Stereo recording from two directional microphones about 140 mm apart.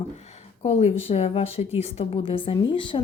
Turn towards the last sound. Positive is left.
turn(degrees=35)  # may be behind; listen again after turning